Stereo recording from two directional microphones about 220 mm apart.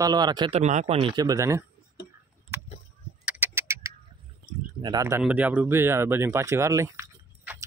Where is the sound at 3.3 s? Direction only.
10° right (ahead or behind).